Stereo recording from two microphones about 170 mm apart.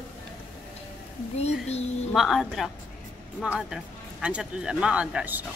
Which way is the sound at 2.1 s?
Centre (ahead or behind).